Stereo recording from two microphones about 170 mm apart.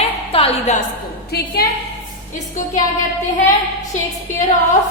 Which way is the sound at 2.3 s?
50° left (ahead or behind).